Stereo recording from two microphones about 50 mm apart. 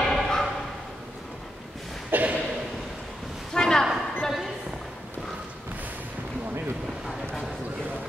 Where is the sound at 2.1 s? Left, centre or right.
Right.